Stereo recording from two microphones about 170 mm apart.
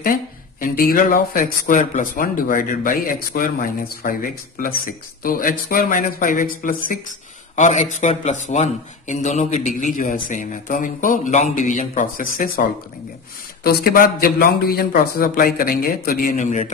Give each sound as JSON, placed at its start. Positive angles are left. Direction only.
{"t": 0.0, "sound": "speech", "side_deg": 55}
{"t": 13.7, "sound": "speech", "side_deg": 60}